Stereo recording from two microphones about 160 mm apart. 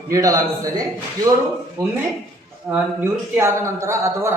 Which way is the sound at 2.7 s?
15° right (ahead or behind).